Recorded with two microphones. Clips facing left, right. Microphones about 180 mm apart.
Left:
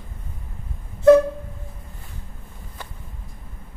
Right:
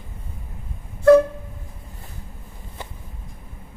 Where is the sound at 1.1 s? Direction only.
20° left (ahead or behind).